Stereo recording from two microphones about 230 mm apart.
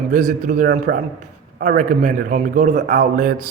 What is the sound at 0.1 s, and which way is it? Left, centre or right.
A man's voice, right.